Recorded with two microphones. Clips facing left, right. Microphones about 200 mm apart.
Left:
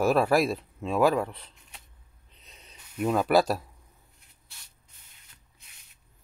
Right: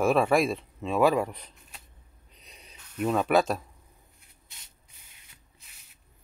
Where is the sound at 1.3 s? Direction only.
15° right (ahead or behind).